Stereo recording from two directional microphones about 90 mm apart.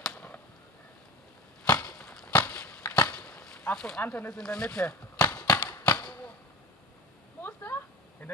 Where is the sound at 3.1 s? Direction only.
15° left (ahead or behind).